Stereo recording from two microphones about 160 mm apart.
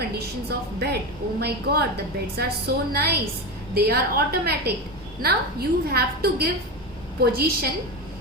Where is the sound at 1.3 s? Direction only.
85° right.